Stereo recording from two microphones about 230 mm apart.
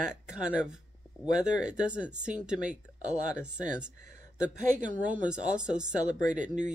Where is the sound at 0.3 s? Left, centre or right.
Centre.